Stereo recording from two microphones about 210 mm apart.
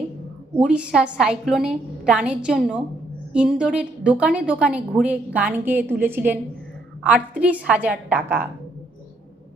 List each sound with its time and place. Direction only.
0.5 s a woman's voice: 5° right (ahead or behind)